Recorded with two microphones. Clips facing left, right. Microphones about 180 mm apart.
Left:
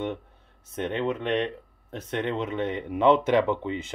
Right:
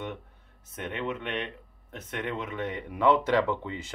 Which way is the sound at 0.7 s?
30° left (ahead or behind).